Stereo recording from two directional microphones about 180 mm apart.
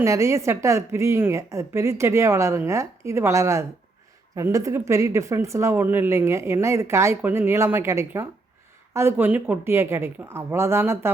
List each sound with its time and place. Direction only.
0.0 s speech: 15° right (ahead or behind)